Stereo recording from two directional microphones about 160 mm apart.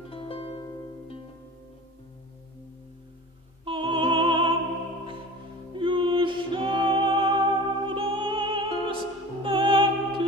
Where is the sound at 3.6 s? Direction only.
30° right (ahead or behind).